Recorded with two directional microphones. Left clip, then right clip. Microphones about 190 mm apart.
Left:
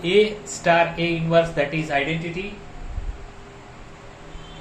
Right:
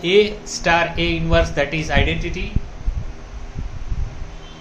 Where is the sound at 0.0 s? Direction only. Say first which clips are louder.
Right 3 dB; 35° right (ahead or behind).